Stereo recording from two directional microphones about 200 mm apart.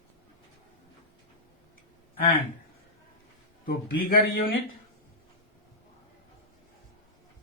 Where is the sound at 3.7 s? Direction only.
45° left (ahead or behind).